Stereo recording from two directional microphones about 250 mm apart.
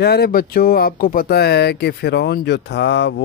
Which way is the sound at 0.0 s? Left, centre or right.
Left.